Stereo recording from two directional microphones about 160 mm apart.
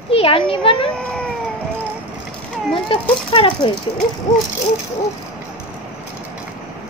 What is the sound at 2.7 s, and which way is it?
Speech, 35° left (ahead or behind).